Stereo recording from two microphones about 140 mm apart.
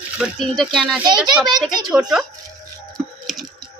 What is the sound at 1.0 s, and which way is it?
Speech, 30° right (ahead or behind).